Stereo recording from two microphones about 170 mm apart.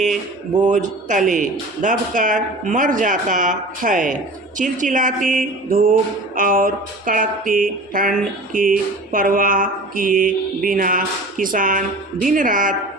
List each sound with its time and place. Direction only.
0.7 s speech: 45° right (ahead or behind)